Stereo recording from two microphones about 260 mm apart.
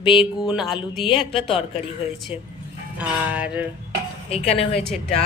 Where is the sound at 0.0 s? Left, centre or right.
Centre.